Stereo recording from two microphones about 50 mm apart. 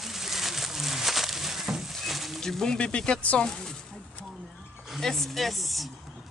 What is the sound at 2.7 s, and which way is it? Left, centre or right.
Speech, centre.